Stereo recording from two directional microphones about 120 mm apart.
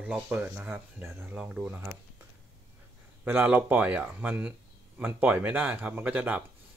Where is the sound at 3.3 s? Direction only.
15° right (ahead or behind).